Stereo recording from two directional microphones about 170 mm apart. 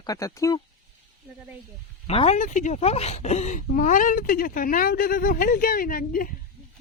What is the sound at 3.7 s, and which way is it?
Speech, 50° left (ahead or behind).